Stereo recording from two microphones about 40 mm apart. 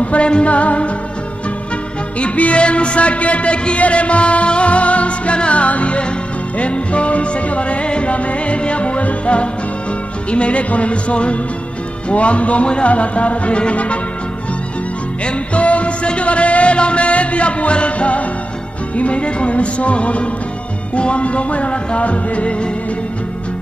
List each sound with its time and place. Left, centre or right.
0.0 s music: left
2.1 s speech: left
15.2 s music: left
18.9 s speech: left